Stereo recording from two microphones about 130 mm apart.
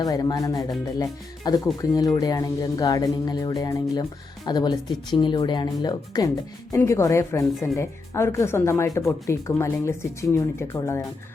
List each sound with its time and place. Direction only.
0.0 s speech: 30° left (ahead or behind)